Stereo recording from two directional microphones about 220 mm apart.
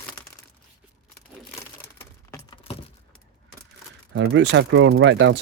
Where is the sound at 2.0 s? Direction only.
15° left (ahead or behind).